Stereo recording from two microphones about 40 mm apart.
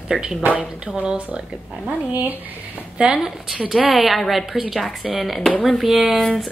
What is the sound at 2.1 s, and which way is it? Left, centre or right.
Speech, right.